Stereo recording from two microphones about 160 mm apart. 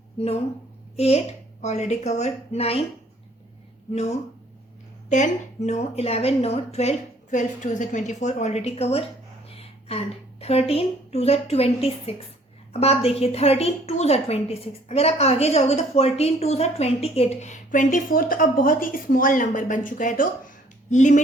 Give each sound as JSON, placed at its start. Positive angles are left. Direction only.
{"t": 0.2, "sound": "a woman's voice", "side_deg": 40}
{"t": 5.0, "sound": "a woman's voice", "side_deg": 50}